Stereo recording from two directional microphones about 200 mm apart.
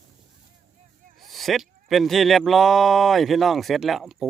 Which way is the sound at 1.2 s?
Centre (ahead or behind).